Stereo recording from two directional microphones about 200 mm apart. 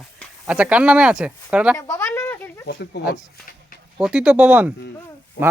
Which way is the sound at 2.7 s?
55° left (ahead or behind).